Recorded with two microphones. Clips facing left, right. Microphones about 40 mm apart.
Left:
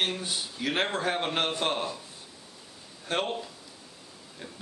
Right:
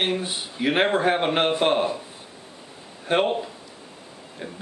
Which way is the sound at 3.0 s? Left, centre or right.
Right.